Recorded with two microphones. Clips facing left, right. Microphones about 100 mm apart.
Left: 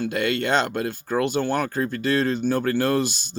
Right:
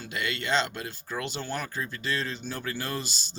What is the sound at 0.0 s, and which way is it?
Speech, 50° left (ahead or behind).